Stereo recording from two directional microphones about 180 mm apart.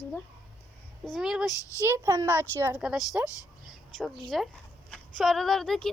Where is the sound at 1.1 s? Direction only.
Centre (ahead or behind).